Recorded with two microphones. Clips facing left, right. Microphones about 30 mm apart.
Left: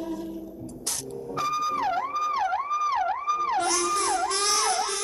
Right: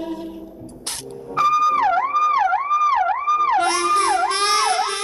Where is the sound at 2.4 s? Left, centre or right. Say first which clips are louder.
Right 8 dB; right.